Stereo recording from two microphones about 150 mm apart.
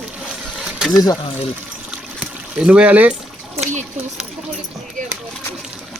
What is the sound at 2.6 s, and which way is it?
Speech, 10° right (ahead or behind).